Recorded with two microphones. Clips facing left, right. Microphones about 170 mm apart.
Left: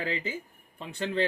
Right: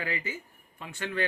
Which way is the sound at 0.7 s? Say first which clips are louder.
Left 3 dB; 30° left (ahead or behind).